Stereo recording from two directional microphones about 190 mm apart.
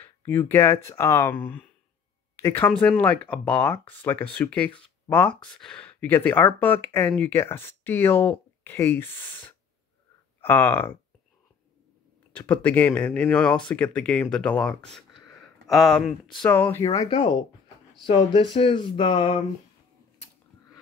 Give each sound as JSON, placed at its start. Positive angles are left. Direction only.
{"t": 0.0, "sound": "speech", "side_deg": 10}
{"t": 10.4, "sound": "speech", "side_deg": 10}
{"t": 12.3, "sound": "speech", "side_deg": 10}